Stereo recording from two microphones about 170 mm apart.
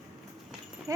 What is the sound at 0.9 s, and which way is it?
Speech, 20° right (ahead or behind).